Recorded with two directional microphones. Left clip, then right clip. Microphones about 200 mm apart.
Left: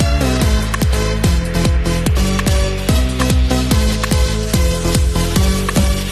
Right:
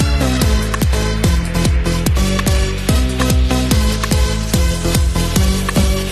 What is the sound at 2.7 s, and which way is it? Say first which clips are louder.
Music: even; 5° right (ahead or behind).